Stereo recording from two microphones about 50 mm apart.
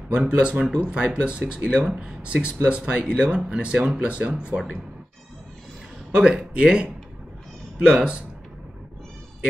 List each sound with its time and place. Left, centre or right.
0.1 s speech: right
6.1 s speech: right